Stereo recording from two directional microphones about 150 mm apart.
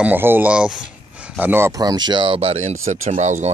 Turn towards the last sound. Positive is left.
turn(degrees=-50)  # may be behind; listen again after turning